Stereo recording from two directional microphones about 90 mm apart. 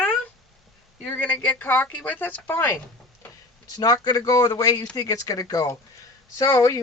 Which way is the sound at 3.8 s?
45° left (ahead or behind).